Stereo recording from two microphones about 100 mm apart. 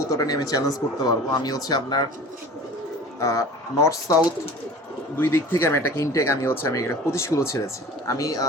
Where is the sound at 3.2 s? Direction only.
30° left (ahead or behind).